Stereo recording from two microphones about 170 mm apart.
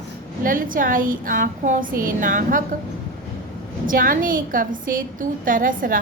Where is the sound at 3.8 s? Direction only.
55° right (ahead or behind).